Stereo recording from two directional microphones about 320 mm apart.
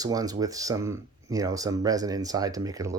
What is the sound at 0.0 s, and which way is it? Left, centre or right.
Speech, centre.